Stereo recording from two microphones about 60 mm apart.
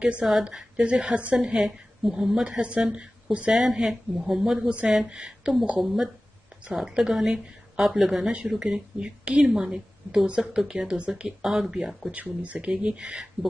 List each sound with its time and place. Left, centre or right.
0.0 s a woman's voice: centre
2.6 s a woman's voice: right
4.6 s a woman's voice: centre
12.1 s a woman's voice: right